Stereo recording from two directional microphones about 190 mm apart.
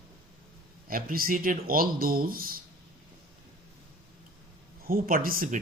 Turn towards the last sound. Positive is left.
turn(degrees=-50)  # may be behind; listen again after turning